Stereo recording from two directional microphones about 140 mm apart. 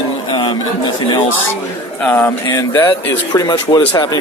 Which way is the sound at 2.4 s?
25° left (ahead or behind).